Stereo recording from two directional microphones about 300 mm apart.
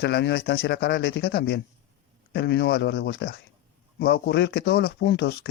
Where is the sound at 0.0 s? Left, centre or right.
Left.